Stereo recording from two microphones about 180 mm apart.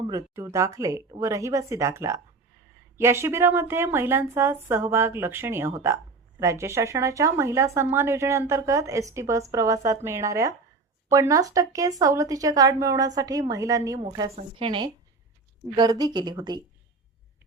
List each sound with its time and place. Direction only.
0.1 s speech: 20° right (ahead or behind)